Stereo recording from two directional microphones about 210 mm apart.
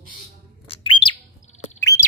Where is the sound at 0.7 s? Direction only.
25° left (ahead or behind).